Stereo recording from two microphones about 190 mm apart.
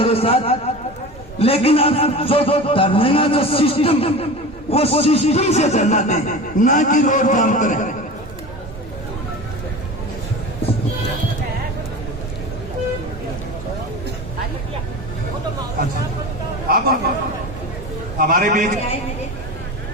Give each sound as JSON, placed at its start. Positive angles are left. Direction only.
{"t": 0.0, "sound": "a man's voice", "side_deg": 30}
{"t": 16.6, "sound": "a man's voice", "side_deg": -55}
{"t": 18.2, "sound": "a man's voice", "side_deg": -45}